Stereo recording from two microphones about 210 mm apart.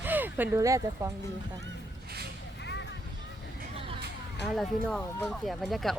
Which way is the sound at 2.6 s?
55° left (ahead or behind).